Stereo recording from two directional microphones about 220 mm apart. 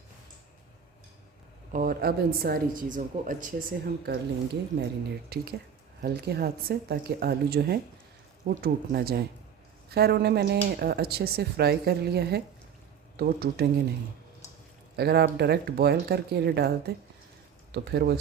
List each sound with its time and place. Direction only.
1.7 s a woman's voice: 40° right (ahead or behind)
5.3 s speech: 45° right (ahead or behind)
14.9 s speech: 45° right (ahead or behind)